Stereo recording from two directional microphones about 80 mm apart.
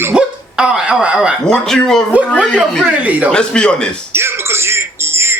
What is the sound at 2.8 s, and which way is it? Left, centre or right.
Speech, centre.